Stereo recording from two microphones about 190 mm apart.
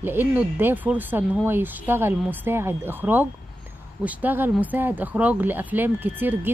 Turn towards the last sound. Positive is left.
turn(degrees=-10)  # may be behind; listen again after turning